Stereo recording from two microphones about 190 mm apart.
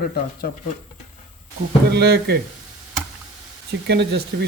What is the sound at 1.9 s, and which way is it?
Speech, 60° right (ahead or behind).